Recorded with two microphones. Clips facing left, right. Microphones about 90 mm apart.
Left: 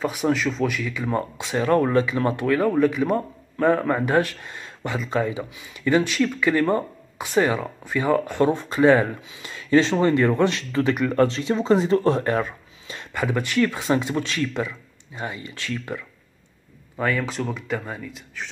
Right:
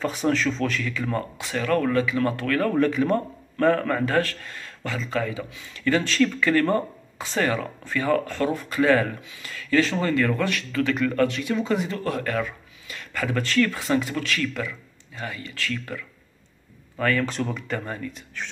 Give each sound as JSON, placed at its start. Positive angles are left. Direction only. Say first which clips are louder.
{"t": 0.0, "sound": "speech", "louder": "left 1 dB", "side_deg": 10}